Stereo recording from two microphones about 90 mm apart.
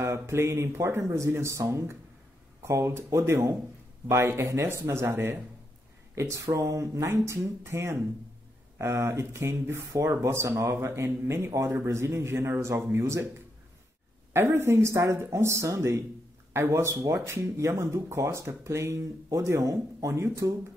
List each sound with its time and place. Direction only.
0.0 s speech: 30° right (ahead or behind)
14.3 s speech: 25° right (ahead or behind)